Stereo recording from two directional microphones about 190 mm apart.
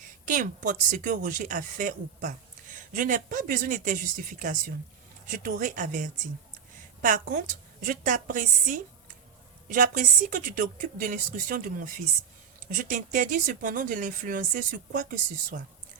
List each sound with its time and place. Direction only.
0.3 s speech: 45° right (ahead or behind)